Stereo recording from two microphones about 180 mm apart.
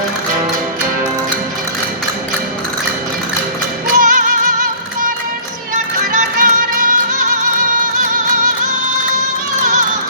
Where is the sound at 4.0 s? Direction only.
50° right (ahead or behind).